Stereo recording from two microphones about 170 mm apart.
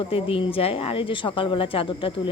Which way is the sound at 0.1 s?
35° left (ahead or behind).